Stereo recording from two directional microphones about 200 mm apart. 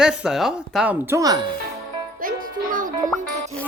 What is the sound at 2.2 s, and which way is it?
Music, 45° right (ahead or behind).